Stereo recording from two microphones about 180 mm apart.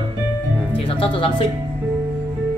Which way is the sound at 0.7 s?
30° left (ahead or behind).